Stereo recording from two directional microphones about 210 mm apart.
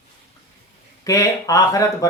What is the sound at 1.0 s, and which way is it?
Speech, 15° left (ahead or behind).